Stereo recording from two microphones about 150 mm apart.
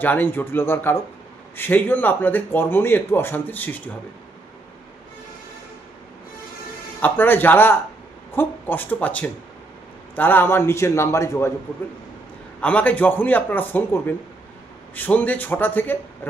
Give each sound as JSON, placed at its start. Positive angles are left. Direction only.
{"t": 0.0, "sound": "speech", "side_deg": 15}
{"t": 7.0, "sound": "speech", "side_deg": 10}
{"t": 12.5, "sound": "speech", "side_deg": 10}